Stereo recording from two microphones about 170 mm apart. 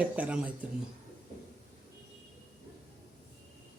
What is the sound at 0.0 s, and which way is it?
Speech, 10° right (ahead or behind).